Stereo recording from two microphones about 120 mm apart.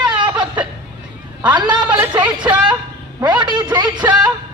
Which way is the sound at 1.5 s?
40° right (ahead or behind).